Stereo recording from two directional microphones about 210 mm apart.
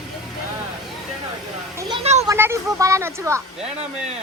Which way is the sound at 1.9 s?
30° right (ahead or behind).